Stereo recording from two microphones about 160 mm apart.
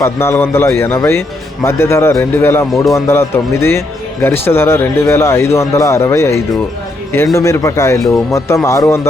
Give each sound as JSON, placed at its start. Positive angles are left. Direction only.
{"t": 0.0, "sound": "speech", "side_deg": 15}